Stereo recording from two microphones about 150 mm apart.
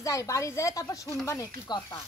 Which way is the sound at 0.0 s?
20° left (ahead or behind).